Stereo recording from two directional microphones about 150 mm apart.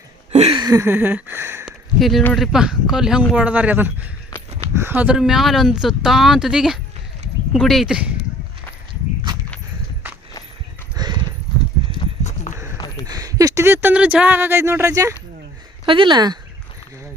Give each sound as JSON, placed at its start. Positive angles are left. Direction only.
{"t": 0.5, "sound": "a sound", "side_deg": -25}
{"t": 2.0, "sound": "speech", "side_deg": 0}
{"t": 10.9, "sound": "clip-clop", "side_deg": -30}
{"t": 12.7, "sound": "a sound", "side_deg": 25}
{"t": 13.1, "sound": "speech", "side_deg": -25}
{"t": 15.9, "sound": "speech", "side_deg": -35}